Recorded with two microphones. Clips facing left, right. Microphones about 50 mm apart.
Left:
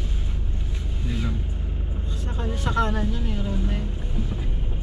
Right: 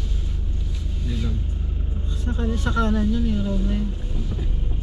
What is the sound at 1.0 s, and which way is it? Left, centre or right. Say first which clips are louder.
Vehicle: even; left.